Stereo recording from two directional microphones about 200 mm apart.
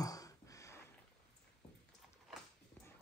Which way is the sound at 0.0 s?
15° left (ahead or behind).